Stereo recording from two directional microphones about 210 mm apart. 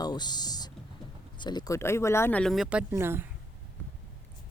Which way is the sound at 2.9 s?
10° right (ahead or behind).